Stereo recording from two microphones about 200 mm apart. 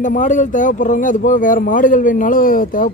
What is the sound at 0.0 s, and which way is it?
Speech, 40° left (ahead or behind).